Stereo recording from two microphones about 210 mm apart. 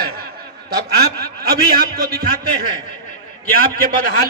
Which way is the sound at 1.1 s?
45° right (ahead or behind).